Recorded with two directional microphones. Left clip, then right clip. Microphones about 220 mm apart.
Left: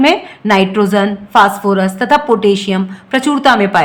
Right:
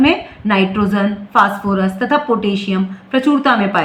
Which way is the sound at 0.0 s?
55° left (ahead or behind).